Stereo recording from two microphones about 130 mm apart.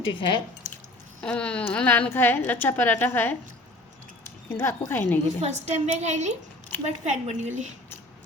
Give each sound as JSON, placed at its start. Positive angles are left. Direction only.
{"t": 0.1, "sound": "speech", "side_deg": 40}
{"t": 1.2, "sound": "a woman's voice", "side_deg": 10}
{"t": 4.4, "sound": "a woman's voice", "side_deg": 20}
{"t": 5.4, "sound": "a woman's voice", "side_deg": -60}